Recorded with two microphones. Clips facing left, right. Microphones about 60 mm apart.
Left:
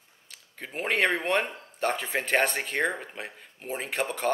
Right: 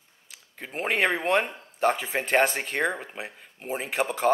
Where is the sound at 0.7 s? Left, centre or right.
Centre.